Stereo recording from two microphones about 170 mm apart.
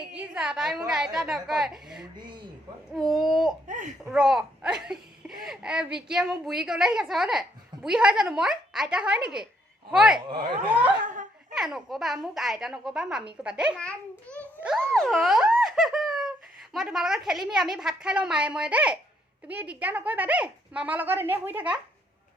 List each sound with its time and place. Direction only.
0.1 s a woman's voice: 5° right (ahead or behind)
3.7 s a child's voice: 50° right (ahead or behind)
4.0 s a woman's voice: 5° right (ahead or behind)
11.0 s a sound: 50° right (ahead or behind)
11.5 s a woman's voice: centre (ahead or behind)
14.3 s a child's voice: 5° left (ahead or behind); by 21.8 s 10° right (ahead or behind)